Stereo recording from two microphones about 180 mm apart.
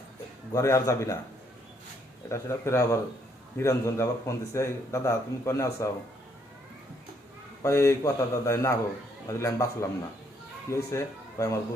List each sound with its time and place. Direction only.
0.5 s speech: 15° left (ahead or behind)
2.3 s speech: 15° left (ahead or behind)
7.6 s speech: 15° left (ahead or behind)